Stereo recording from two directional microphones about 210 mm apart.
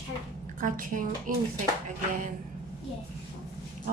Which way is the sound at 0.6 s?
40° right (ahead or behind).